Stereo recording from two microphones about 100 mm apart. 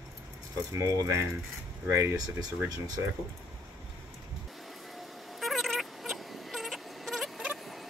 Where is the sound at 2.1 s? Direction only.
40° right (ahead or behind).